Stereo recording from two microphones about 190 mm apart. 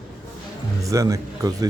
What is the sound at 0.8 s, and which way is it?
Speech, 15° right (ahead or behind).